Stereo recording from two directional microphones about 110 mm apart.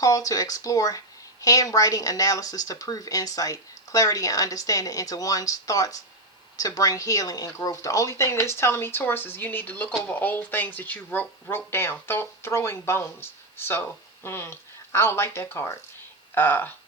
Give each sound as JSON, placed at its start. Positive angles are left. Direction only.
{"t": 0.0, "sound": "speech", "side_deg": 30}